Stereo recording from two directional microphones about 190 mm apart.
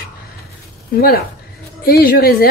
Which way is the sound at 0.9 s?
55° left (ahead or behind).